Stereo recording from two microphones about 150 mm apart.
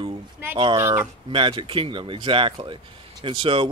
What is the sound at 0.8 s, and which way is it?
Speech, 15° right (ahead or behind).